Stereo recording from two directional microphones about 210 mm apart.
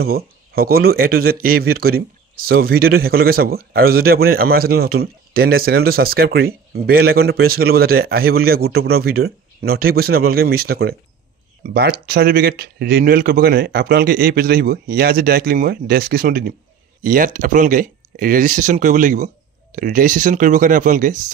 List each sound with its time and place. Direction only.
0.0 s speech: 45° right (ahead or behind)